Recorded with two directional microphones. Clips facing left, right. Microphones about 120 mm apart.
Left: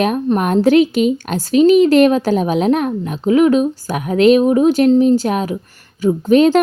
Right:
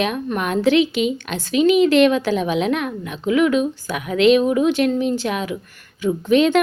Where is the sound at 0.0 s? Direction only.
40° left (ahead or behind).